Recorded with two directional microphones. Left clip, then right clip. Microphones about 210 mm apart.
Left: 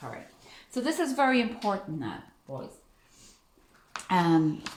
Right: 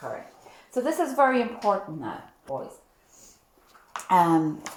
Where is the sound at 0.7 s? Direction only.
20° left (ahead or behind).